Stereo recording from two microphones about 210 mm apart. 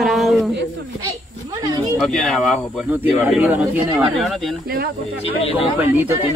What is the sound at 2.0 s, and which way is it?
Speech, centre (ahead or behind).